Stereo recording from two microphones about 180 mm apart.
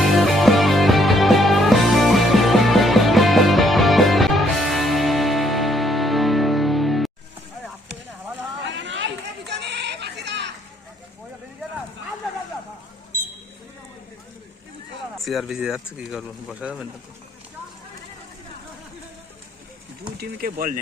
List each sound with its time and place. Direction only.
0.0 s music: centre (ahead or behind)
8.6 s chatter: 85° right
15.2 s speech: centre (ahead or behind)
20.1 s speech: 50° right (ahead or behind)